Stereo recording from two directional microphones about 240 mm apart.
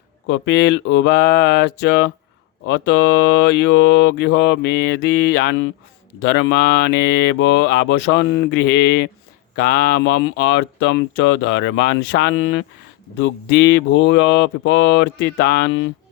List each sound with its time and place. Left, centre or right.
0.3 s speech: left